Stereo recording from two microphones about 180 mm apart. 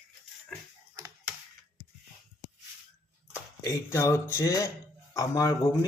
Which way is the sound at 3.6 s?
15° left (ahead or behind).